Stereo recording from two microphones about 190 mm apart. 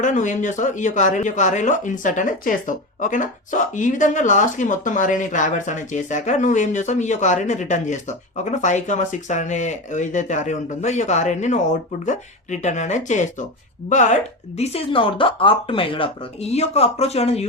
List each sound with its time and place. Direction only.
0.0 s speech: 40° left (ahead or behind)